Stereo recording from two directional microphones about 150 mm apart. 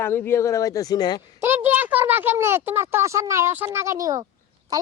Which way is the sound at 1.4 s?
15° right (ahead or behind).